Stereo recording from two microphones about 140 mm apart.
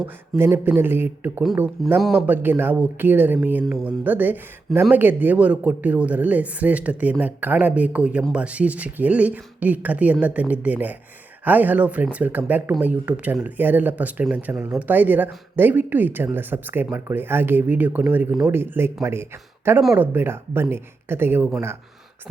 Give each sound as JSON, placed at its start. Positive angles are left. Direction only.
{"t": 0.0, "sound": "speech", "side_deg": -15}
{"t": 1.8, "sound": "speech", "side_deg": 0}
{"t": 2.2, "sound": "speech", "side_deg": -15}